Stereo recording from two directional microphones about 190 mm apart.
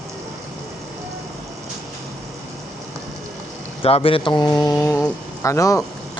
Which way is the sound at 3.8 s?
30° left (ahead or behind).